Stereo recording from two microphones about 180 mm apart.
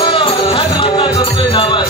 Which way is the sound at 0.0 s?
30° left (ahead or behind).